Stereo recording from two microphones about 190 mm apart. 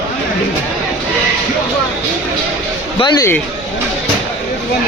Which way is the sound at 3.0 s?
20° left (ahead or behind).